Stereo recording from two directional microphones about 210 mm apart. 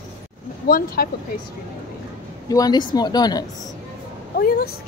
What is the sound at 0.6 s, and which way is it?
Speech, 45° left (ahead or behind).